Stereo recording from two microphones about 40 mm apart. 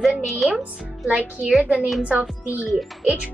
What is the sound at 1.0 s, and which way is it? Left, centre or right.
Speech, right.